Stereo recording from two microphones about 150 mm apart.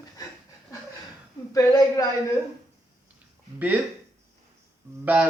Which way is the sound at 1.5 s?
25° left (ahead or behind).